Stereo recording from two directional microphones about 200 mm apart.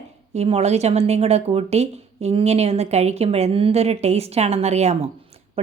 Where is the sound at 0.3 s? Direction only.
30° right (ahead or behind).